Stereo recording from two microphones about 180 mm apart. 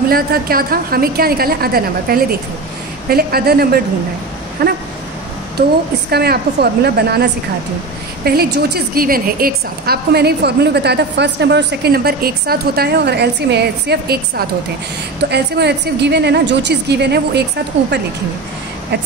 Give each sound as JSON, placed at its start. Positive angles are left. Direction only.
{"t": 0.1, "sound": "a woman's voice", "side_deg": -55}
{"t": 6.0, "sound": "a woman's voice", "side_deg": -60}
{"t": 8.3, "sound": "a woman's voice", "side_deg": -60}